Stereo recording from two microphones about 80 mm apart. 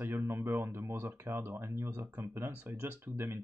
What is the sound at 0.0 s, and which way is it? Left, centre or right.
Speech, right.